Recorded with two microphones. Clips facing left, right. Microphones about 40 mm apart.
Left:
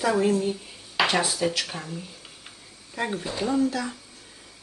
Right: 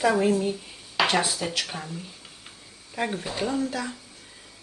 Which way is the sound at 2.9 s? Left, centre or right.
Centre.